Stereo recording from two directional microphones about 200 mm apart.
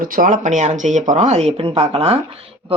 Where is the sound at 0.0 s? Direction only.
45° right (ahead or behind).